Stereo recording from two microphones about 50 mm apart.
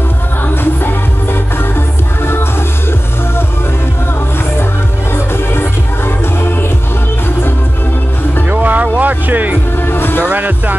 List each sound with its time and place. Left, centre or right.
5.1 s music: left
8.5 s music: right
9.8 s music: left
10.2 s music: right